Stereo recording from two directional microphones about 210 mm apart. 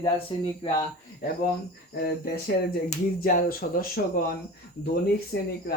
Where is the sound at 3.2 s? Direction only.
45° left (ahead or behind).